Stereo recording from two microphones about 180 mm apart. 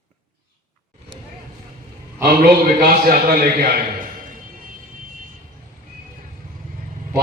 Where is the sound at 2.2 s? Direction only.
60° right (ahead or behind).